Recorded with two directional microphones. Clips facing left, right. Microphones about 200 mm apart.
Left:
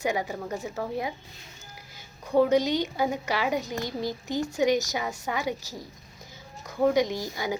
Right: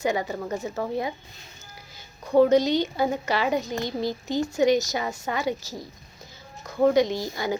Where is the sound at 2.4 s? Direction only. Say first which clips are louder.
Right 4 dB; 10° left (ahead or behind).